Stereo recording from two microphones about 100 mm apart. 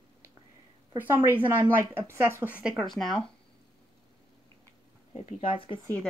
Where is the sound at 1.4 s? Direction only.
20° right (ahead or behind).